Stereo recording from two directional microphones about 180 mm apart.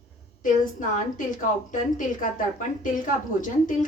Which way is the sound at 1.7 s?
45° left (ahead or behind).